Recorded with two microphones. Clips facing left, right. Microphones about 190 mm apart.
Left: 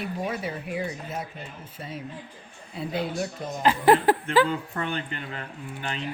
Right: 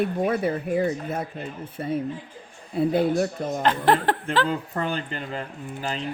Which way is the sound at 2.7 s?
55° right (ahead or behind).